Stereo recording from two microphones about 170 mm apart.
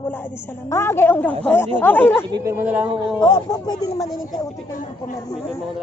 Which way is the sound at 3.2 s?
25° left (ahead or behind).